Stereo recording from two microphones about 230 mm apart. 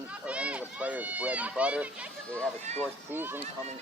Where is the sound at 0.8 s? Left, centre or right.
Centre.